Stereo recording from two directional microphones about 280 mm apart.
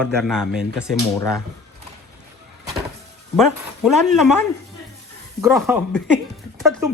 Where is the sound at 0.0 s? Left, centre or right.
Centre.